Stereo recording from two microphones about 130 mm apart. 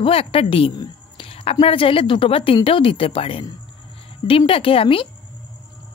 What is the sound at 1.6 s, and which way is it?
Speech, 45° left (ahead or behind).